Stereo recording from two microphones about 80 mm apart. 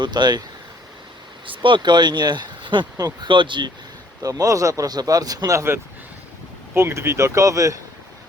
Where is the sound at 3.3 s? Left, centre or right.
Right.